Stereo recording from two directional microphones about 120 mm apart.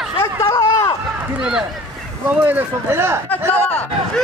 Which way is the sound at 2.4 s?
20° right (ahead or behind).